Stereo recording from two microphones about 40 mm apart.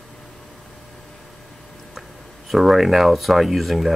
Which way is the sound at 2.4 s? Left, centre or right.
Centre.